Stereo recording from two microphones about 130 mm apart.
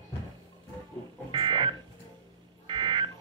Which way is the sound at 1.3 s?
40° right (ahead or behind).